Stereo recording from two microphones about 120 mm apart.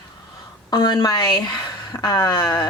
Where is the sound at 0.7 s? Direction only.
35° left (ahead or behind).